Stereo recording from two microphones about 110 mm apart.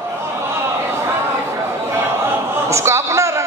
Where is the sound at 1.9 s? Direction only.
20° right (ahead or behind).